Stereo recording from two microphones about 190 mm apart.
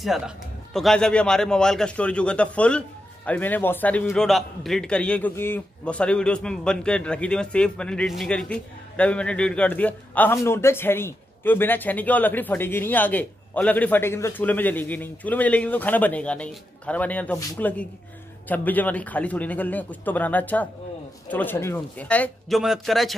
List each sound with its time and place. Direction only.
0.7 s a man's voice: centre (ahead or behind)